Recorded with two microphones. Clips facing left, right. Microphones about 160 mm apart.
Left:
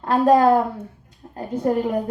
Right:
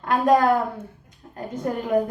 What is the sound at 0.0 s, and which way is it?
Speech, 30° left (ahead or behind).